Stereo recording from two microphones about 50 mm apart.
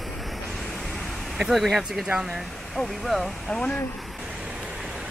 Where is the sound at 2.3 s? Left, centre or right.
Centre.